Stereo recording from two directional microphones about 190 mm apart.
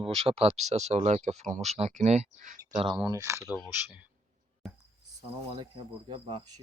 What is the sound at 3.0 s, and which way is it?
Speech, 15° right (ahead or behind).